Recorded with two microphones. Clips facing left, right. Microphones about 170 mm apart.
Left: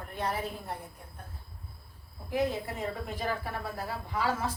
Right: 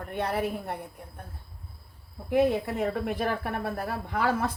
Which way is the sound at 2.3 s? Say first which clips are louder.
Right 7 dB; 65° right (ahead or behind).